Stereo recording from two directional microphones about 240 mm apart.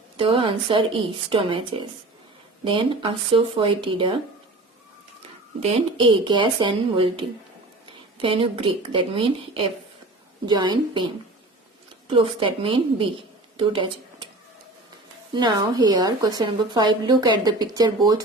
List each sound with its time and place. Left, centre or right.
0.2 s a woman's voice: right
5.5 s a woman's voice: right
12.0 s a woman's voice: right
15.3 s a woman's voice: centre